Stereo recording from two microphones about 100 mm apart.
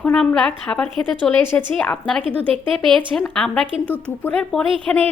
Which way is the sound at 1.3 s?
20° left (ahead or behind).